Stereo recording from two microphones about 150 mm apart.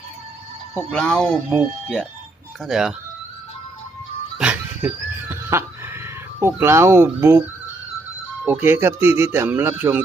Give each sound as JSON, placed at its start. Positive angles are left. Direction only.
{"t": 0.7, "sound": "speech", "side_deg": 5}
{"t": 4.4, "sound": "music", "side_deg": -10}
{"t": 5.3, "sound": "neigh", "side_deg": -15}
{"t": 6.4, "sound": "speech", "side_deg": -15}
{"t": 8.4, "sound": "speech", "side_deg": -10}